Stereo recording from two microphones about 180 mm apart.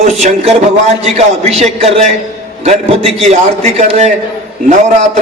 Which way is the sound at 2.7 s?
35° right (ahead or behind).